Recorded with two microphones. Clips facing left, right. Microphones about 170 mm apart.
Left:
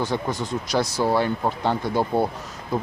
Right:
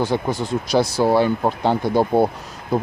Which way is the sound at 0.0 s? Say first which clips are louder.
Right 4 dB; 10° right (ahead or behind).